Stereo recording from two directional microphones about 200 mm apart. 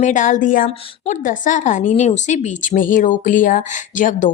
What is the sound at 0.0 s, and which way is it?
A woman's voice, 40° left (ahead or behind).